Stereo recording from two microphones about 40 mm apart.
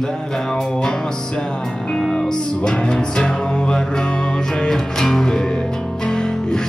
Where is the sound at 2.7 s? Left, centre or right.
Left.